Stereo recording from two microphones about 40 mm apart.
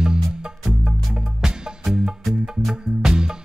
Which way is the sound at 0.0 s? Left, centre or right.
Centre.